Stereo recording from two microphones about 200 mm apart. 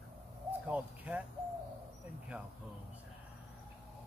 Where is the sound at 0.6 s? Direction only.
5° right (ahead or behind).